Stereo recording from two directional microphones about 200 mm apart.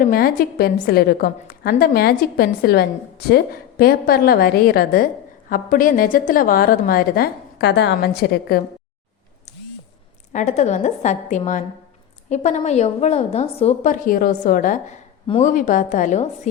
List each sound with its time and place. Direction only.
0.0 s a woman's voice: 50° left (ahead or behind)
9.5 s a sound: 35° left (ahead or behind)
10.3 s a woman's voice: 35° left (ahead or behind)